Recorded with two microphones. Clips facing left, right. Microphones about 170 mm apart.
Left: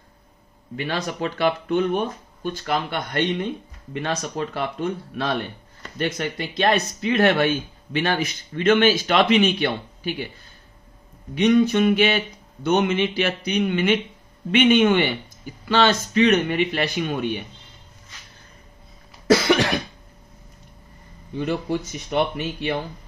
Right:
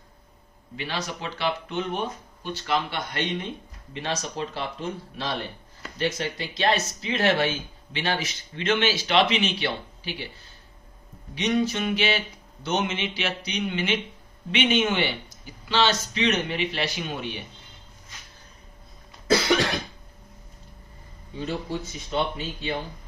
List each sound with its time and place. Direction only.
0.7 s speech: 55° left (ahead or behind)
11.3 s speech: 55° left (ahead or behind)
19.2 s cough: 65° left (ahead or behind)
21.4 s speech: 80° left